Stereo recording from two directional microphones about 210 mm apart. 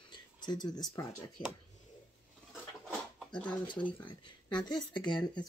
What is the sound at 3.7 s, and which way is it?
Speech, 20° left (ahead or behind).